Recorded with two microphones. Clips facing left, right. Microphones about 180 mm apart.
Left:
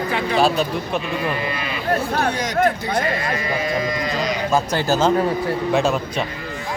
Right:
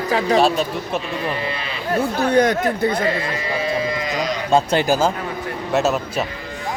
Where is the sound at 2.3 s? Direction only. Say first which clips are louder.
Right 6 dB; 60° right (ahead or behind).